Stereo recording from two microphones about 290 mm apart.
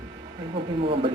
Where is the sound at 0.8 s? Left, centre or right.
Centre.